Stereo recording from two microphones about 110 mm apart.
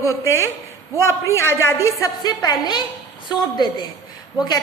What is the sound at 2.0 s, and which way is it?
A woman's voice, 35° left (ahead or behind).